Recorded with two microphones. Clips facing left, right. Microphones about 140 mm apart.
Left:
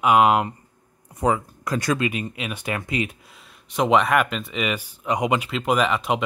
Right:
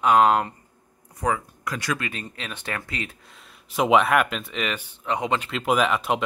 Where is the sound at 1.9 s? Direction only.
15° left (ahead or behind).